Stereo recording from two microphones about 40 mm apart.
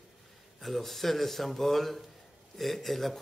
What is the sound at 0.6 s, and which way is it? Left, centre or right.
Speech, centre.